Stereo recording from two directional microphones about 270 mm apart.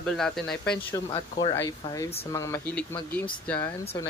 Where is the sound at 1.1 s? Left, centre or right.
Centre.